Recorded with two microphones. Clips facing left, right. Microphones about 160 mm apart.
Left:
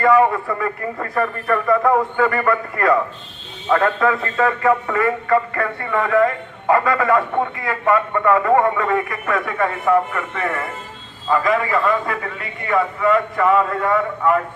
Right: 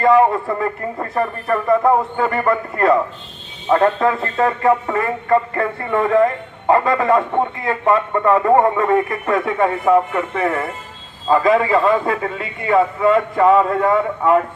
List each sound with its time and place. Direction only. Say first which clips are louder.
0.0 s a man's voice: right 2 dB; 25° right (ahead or behind)